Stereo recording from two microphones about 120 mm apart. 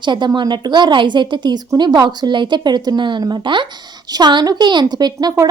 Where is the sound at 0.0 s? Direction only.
40° right (ahead or behind).